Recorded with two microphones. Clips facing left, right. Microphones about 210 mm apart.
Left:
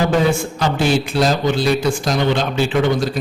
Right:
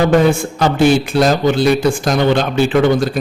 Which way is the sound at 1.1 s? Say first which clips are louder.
Right 4 dB; 55° right (ahead or behind).